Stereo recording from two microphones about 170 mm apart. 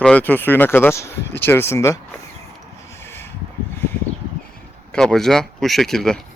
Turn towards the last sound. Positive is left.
turn(degrees=5)  # may be behind; listen again after turning